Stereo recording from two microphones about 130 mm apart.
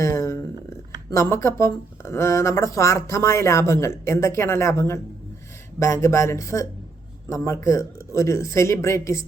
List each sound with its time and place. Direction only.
0.0 s speech: 25° left (ahead or behind)